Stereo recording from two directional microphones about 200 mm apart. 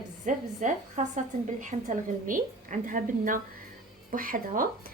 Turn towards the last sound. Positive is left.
turn(degrees=-45)  # may be behind; listen again after turning